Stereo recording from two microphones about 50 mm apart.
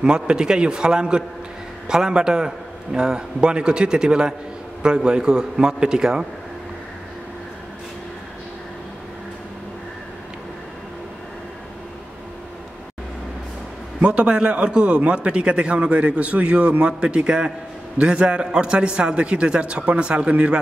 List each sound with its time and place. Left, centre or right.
0.0 s a man's voice: centre
14.0 s a man's voice: right